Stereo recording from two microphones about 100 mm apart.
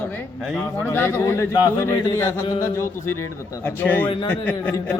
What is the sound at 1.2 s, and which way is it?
A man's voice, 30° left (ahead or behind).